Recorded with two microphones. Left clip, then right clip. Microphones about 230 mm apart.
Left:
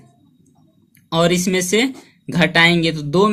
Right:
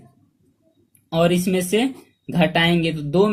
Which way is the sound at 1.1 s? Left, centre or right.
Left.